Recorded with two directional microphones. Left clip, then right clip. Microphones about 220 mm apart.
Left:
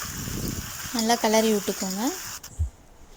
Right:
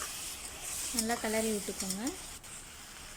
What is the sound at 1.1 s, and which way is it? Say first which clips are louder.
Speech: left 13 dB; 30° left (ahead or behind).